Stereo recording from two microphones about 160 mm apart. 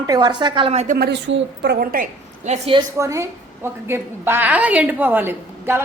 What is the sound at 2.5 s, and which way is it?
Speech, 35° right (ahead or behind).